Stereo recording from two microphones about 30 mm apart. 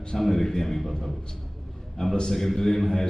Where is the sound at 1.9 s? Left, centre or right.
Centre.